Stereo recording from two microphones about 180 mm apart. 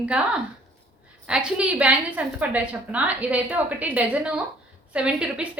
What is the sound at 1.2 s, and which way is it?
A woman's voice, 5° right (ahead or behind).